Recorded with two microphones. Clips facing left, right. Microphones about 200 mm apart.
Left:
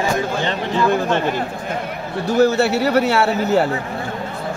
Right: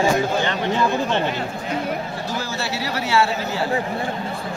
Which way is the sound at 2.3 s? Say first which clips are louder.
Left 15 dB; 65° left (ahead or behind).